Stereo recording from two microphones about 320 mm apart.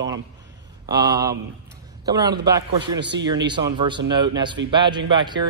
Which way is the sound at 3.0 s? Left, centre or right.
Right.